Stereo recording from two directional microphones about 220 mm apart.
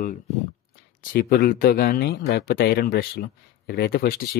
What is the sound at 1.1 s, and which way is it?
Speech, 45° left (ahead or behind).